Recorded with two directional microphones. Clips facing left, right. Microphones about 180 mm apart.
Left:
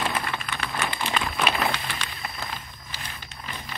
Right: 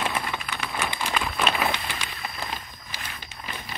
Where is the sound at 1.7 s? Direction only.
15° right (ahead or behind).